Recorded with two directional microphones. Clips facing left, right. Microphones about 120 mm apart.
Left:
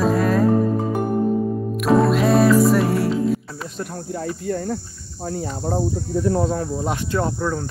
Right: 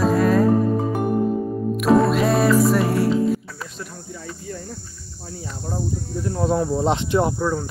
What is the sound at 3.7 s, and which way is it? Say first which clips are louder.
Speech: left 7 dB; 55° left (ahead or behind).